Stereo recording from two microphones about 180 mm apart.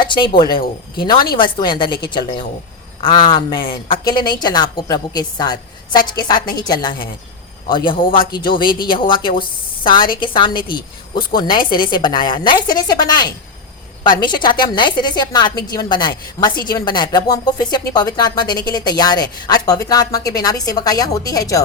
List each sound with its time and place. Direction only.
0.0 s a woman's voice: 25° left (ahead or behind)
8.6 s speech: 55° left (ahead or behind)
8.9 s a woman's voice: 25° left (ahead or behind)